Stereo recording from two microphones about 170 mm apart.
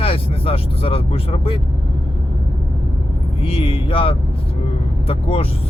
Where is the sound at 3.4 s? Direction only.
35° left (ahead or behind).